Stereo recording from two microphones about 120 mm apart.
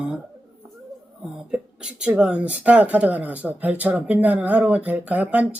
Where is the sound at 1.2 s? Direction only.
5° right (ahead or behind).